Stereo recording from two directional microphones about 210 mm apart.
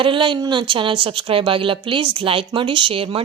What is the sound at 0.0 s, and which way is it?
A woman's voice, 25° right (ahead or behind).